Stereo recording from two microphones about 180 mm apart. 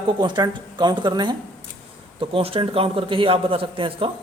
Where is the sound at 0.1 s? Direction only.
25° right (ahead or behind).